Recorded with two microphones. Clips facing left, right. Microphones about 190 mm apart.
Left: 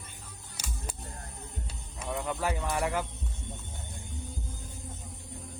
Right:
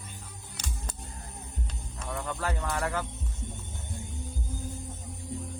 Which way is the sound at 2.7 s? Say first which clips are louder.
Left 1 dB; 15° left (ahead or behind).